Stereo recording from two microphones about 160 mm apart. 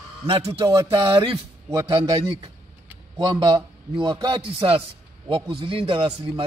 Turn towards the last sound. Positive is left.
turn(degrees=-35)  # may be behind; listen again after turning